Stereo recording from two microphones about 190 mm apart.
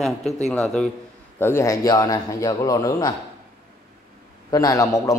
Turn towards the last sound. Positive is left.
turn(degrees=15)  # may be behind; listen again after turning